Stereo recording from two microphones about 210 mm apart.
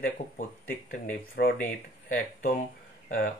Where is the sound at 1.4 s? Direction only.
50° left (ahead or behind).